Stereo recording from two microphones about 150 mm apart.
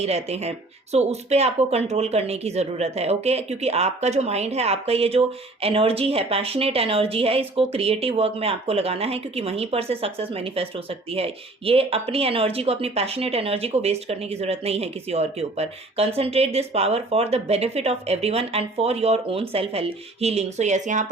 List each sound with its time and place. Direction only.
0.0 s a woman's voice: 45° right (ahead or behind)